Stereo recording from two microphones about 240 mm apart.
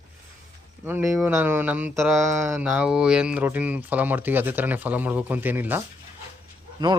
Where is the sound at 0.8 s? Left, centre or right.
Centre.